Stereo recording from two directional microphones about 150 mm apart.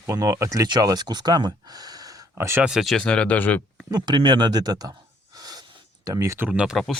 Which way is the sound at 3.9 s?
30° right (ahead or behind).